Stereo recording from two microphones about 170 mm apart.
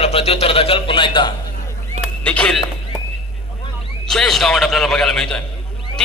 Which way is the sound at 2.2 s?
5° left (ahead or behind).